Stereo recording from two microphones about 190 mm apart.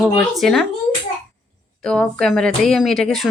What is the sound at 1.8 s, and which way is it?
Speech, 5° left (ahead or behind).